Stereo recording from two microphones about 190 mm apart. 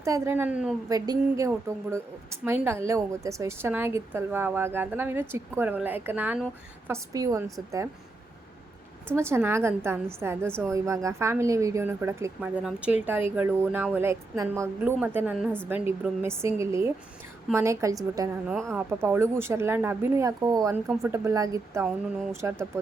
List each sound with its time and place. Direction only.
0.0 s a woman's voice: 15° right (ahead or behind)
0.9 s a woman's voice: 20° right (ahead or behind)
9.1 s a woman's voice: 15° right (ahead or behind)
18.4 s speech: centre (ahead or behind)
18.7 s a woman's voice: 10° right (ahead or behind)